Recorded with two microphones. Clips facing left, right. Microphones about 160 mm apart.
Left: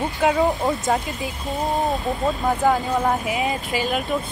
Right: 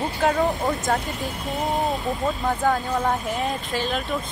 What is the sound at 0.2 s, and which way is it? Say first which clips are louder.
Speech: left 2 dB; 10° left (ahead or behind).